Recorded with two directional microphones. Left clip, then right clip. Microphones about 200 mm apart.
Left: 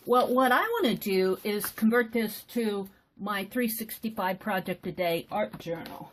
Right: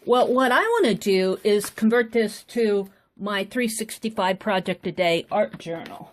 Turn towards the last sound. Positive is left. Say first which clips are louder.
# right 8 dB
turn(degrees=-45)  # may be behind; listen again after turning